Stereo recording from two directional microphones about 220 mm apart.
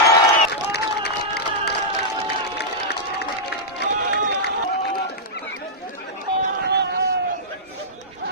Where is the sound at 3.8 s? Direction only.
50° left (ahead or behind).